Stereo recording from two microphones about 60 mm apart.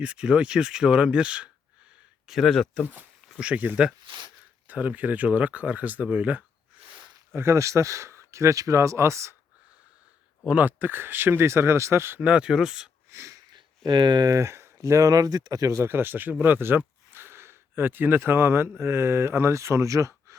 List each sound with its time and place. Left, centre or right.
0.0 s speech: centre
2.4 s speech: centre
3.4 s speech: right
7.3 s speech: right
10.4 s speech: right
12.2 s speech: centre
13.1 s wheeze: right
14.3 s speech: right
15.7 s speech: right